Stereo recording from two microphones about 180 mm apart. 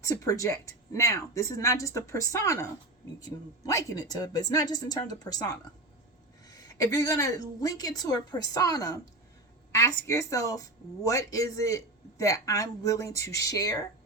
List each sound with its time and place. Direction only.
0.0 s a woman's voice: 20° left (ahead or behind)